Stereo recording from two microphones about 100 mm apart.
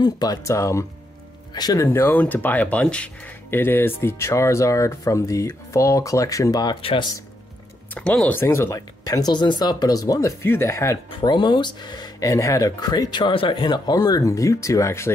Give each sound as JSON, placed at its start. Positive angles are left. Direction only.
{"t": 0.0, "sound": "speech", "side_deg": 40}
{"t": 1.9, "sound": "speech", "side_deg": 25}
{"t": 3.4, "sound": "speech", "side_deg": 25}
{"t": 6.8, "sound": "speech", "side_deg": 70}
{"t": 7.9, "sound": "speech", "side_deg": 10}
{"t": 8.4, "sound": "speech", "side_deg": 25}
{"t": 9.0, "sound": "speech", "side_deg": 40}
{"t": 10.4, "sound": "speech", "side_deg": 25}
{"t": 11.1, "sound": "speech", "side_deg": 55}